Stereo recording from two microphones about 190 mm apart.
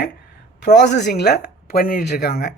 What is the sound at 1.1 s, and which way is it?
Speech, 55° left (ahead or behind).